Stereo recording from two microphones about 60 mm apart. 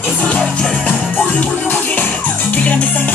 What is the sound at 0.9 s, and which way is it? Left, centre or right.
Music, left.